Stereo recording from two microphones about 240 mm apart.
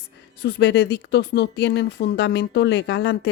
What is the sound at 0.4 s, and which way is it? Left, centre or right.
Speech, left.